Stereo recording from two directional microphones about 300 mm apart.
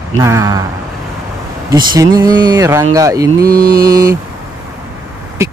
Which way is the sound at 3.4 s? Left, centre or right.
Right.